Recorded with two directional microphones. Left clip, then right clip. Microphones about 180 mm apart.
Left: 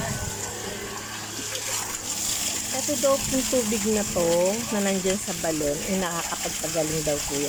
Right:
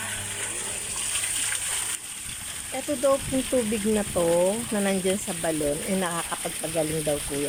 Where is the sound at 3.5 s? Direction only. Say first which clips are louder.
Right 1 dB; centre (ahead or behind).